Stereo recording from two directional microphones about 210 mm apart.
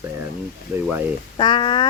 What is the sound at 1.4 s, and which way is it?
Speech, 25° left (ahead or behind).